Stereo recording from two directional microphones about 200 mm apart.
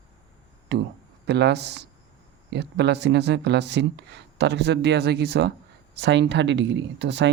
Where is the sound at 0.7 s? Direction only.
60° right (ahead or behind).